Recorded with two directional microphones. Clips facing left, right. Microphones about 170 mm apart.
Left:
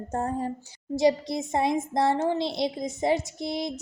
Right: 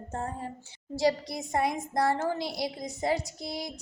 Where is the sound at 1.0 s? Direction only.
20° left (ahead or behind).